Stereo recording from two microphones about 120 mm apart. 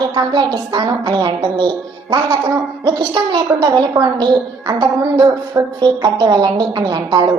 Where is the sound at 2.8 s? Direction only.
35° right (ahead or behind).